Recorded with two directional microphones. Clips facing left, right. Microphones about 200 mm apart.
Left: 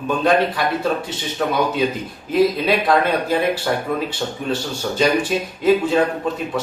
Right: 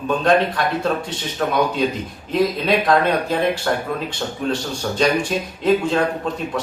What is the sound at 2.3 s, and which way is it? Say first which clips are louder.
A man's voice: left 2 dB; 5° left (ahead or behind).